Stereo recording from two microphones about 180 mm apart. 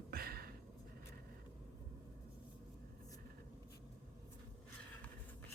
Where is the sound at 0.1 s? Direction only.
55° right (ahead or behind).